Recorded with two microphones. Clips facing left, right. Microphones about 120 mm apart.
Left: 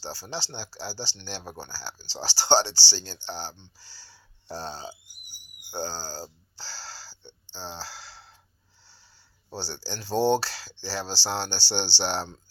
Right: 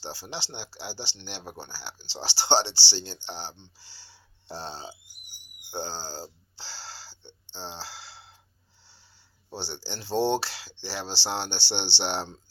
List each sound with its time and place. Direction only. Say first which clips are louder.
0.0 s speech: left 2 dB; 20° right (ahead or behind)
6.6 s wheeze: left 1 dB; 20° right (ahead or behind)
7.5 s cricket: left 1 dB; 20° right (ahead or behind)
9.5 s speech: left 1 dB; 20° right (ahead or behind)